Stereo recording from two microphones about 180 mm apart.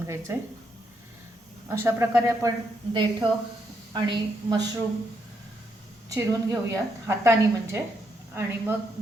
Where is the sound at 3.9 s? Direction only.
25° right (ahead or behind).